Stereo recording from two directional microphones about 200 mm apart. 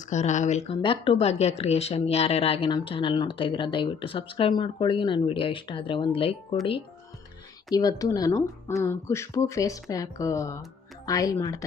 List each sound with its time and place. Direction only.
0.0 s speech: 35° left (ahead or behind)
7.7 s speech: 20° left (ahead or behind)